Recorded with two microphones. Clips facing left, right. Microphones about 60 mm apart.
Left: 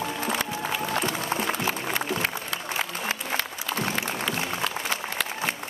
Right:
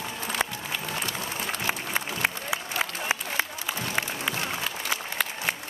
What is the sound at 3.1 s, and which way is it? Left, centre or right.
Applause, centre.